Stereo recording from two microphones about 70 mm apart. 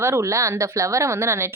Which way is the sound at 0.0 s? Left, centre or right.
Right.